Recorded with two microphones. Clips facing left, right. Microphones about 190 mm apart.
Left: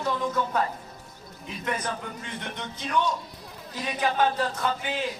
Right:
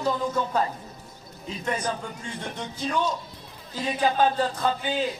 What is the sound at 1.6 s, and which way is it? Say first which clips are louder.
A man's voice: right 2 dB; 30° right (ahead or behind).